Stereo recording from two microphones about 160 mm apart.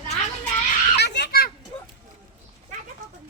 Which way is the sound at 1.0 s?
90° left.